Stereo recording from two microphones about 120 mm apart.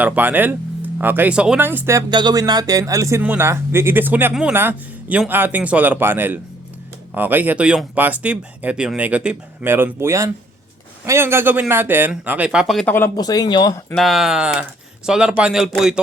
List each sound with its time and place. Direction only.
0.0 s speech: 15° right (ahead or behind)
2.0 s speech: 40° right (ahead or behind)
3.2 s a man's voice: 15° right (ahead or behind)
12.8 s speech: 15° left (ahead or behind)
13.1 s speech: 35° left (ahead or behind)
13.9 s speech: centre (ahead or behind)